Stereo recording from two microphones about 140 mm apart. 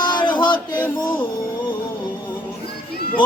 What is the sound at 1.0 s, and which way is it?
Speech, 35° left (ahead or behind).